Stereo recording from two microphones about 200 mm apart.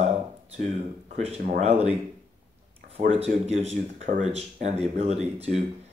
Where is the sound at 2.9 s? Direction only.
30° right (ahead or behind).